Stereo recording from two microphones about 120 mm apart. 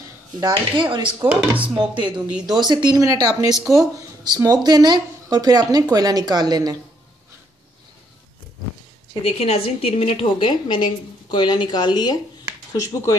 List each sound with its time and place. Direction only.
0.4 s speech: 40° right (ahead or behind)
1.3 s speech: 10° right (ahead or behind)
1.8 s speech: 40° right (ahead or behind)
9.2 s a woman's voice: 60° left (ahead or behind)
10.5 s speech: 40° left (ahead or behind)